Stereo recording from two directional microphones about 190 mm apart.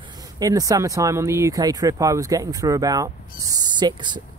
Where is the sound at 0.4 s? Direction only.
20° right (ahead or behind).